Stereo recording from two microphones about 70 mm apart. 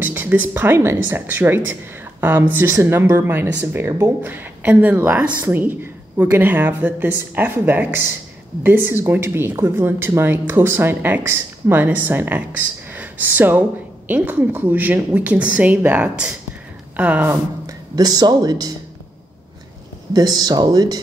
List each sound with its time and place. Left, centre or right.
0.0 s a woman's voice: right
17.9 s speech: right
20.1 s speech: right